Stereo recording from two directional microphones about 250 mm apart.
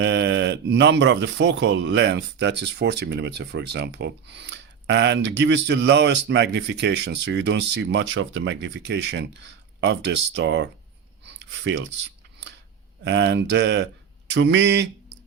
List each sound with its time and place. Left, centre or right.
0.0 s speech: right
11.2 s a sound: right
13.1 s speech: right